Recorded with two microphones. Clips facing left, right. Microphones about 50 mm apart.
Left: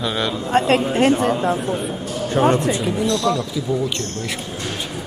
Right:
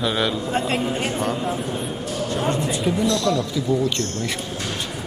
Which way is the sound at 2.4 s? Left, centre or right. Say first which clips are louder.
Left 8 dB; left.